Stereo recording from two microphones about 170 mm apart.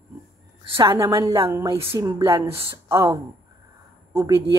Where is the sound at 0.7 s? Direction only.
30° right (ahead or behind).